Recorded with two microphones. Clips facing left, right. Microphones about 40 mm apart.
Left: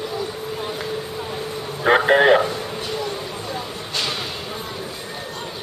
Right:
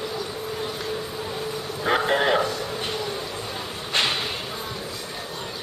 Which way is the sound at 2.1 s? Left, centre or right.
Left.